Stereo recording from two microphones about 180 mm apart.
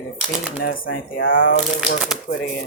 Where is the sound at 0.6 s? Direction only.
55° left (ahead or behind).